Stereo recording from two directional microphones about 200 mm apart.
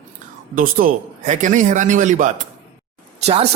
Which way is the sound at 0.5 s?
45° right (ahead or behind).